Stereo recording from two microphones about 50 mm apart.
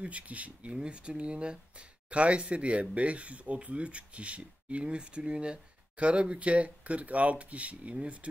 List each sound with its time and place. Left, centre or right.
0.0 s speech: right